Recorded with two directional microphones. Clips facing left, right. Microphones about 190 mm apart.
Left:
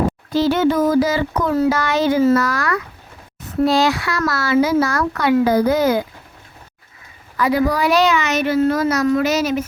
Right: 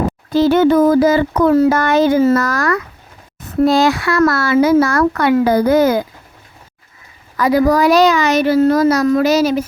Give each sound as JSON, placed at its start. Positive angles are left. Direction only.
{"t": 0.3, "sound": "speech", "side_deg": -50}
{"t": 7.3, "sound": "a child's voice", "side_deg": -40}